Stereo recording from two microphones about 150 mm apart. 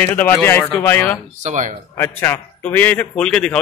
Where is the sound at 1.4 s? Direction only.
55° right (ahead or behind).